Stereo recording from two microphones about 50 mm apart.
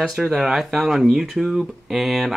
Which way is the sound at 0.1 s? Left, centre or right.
Centre.